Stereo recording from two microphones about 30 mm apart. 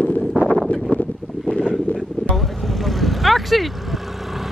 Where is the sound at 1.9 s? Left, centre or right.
Left.